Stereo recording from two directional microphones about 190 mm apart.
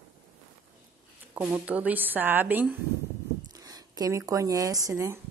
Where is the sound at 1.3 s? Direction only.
10° right (ahead or behind).